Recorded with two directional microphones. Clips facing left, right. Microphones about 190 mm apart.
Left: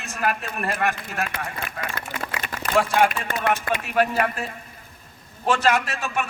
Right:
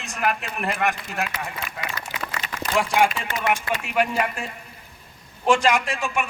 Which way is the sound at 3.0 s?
55° left (ahead or behind).